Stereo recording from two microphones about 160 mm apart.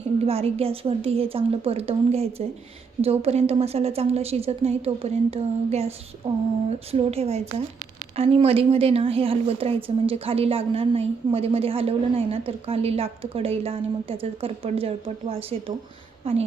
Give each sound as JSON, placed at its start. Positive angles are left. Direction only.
{"t": 0.3, "sound": "a woman's voice", "side_deg": -40}